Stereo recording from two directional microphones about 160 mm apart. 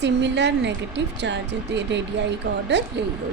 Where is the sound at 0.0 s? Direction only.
90° right.